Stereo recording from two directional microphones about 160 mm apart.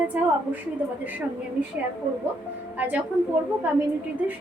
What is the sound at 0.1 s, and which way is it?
Speech, 10° right (ahead or behind).